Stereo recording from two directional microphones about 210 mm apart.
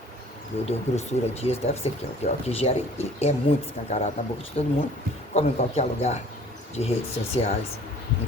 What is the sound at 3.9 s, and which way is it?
A man's voice, 30° left (ahead or behind).